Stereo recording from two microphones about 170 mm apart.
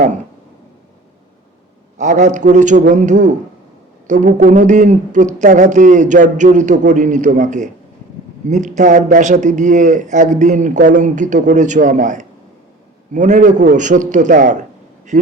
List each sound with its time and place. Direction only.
2.0 s a man's voice: 45° right (ahead or behind)